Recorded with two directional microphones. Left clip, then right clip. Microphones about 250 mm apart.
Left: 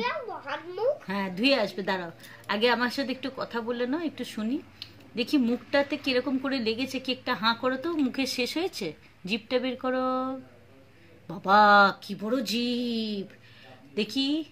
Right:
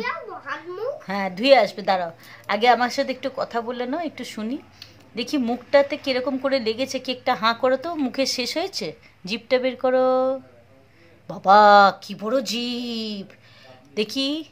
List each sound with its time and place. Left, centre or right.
1.0 s a woman's voice: centre
11.4 s speech: centre